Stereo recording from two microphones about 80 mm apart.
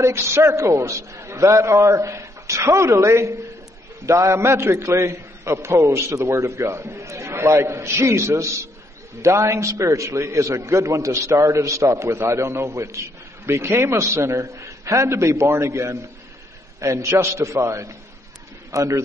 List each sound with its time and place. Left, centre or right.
0.0 s a man's voice: right
17.0 s a man's voice: right